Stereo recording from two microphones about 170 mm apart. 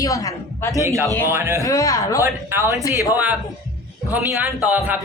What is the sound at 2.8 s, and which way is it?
Speech, 20° left (ahead or behind).